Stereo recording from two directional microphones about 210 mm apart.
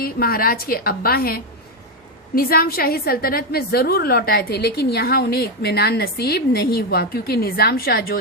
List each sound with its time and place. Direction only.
0.0 s a woman's voice: 45° left (ahead or behind)